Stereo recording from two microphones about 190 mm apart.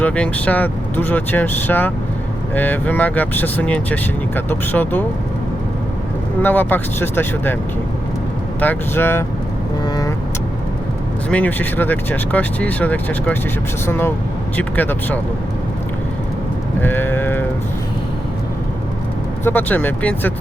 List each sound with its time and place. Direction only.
0.0 s speech: 5° left (ahead or behind)
6.4 s speech: 10° left (ahead or behind)
8.6 s speech: 10° left (ahead or behind)
9.8 s vehicle: 20° left (ahead or behind)
11.3 s speech: 10° left (ahead or behind)
16.8 s speech: 10° left (ahead or behind)
19.5 s speech: 10° left (ahead or behind)